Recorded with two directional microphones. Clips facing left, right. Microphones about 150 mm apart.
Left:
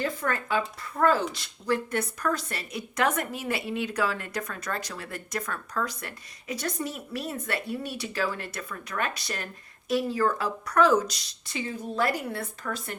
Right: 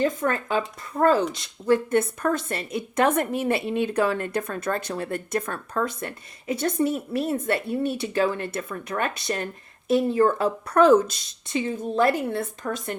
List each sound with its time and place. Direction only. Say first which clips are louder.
0.0 s a woman's voice: right 6 dB; 25° right (ahead or behind)